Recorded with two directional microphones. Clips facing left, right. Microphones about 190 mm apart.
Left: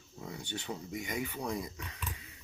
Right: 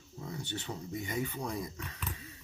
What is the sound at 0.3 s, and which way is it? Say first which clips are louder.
Speech: even; 10° left (ahead or behind).